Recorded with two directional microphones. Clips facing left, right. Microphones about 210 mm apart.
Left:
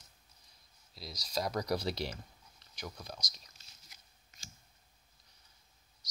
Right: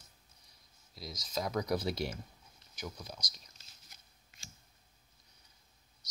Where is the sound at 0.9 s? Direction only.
30° left (ahead or behind).